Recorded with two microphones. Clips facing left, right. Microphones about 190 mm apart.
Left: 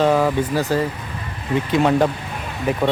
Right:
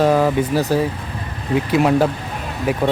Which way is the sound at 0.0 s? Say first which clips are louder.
Right 2 dB; 10° right (ahead or behind).